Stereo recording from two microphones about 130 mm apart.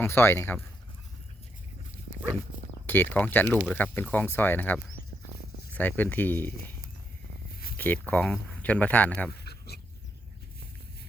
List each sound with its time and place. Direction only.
0.0 s speech: 20° left (ahead or behind)
2.8 s speech: 15° left (ahead or behind)
7.8 s speech: 15° left (ahead or behind)